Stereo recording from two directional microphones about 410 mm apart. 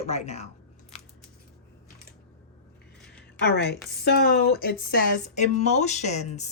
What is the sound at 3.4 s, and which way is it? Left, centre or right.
Speech, left.